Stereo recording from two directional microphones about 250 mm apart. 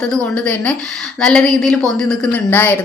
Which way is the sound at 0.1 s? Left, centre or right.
Centre.